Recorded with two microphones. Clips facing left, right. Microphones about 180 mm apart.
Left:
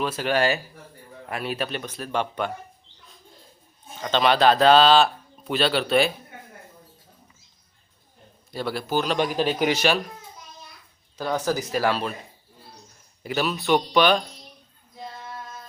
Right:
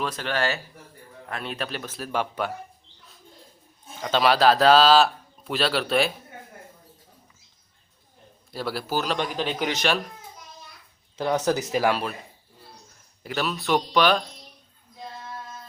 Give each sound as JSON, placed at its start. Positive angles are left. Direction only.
{"t": 0.0, "sound": "speech", "side_deg": 10}
{"t": 4.0, "sound": "speech", "side_deg": -5}
{"t": 8.5, "sound": "speech", "side_deg": -5}
{"t": 11.2, "sound": "speech", "side_deg": -20}
{"t": 13.2, "sound": "speech", "side_deg": 0}